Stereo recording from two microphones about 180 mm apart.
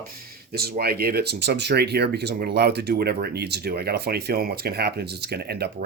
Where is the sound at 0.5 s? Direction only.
60° right (ahead or behind).